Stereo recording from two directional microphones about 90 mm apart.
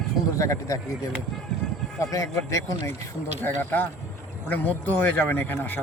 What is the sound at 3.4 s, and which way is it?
Speech, 20° left (ahead or behind).